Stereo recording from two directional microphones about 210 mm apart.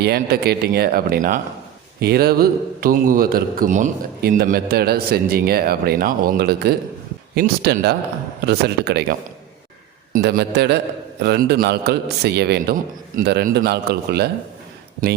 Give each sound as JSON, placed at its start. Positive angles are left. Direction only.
{"t": 0.0, "sound": "a man's voice", "side_deg": -45}